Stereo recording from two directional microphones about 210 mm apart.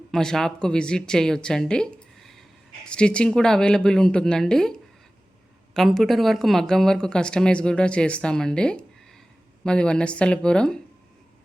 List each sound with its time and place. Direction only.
0.1 s speech: centre (ahead or behind)